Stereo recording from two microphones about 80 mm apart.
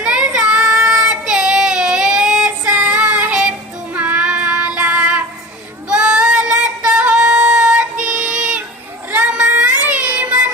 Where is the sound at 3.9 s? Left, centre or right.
Centre.